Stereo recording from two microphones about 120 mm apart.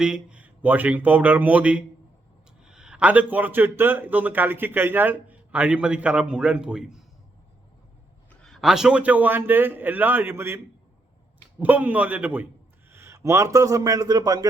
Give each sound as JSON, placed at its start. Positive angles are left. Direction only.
{"t": 0.0, "sound": "a man's voice", "side_deg": -5}
{"t": 8.3, "sound": "a man's voice", "side_deg": 5}
{"t": 11.6, "sound": "a man's voice", "side_deg": -15}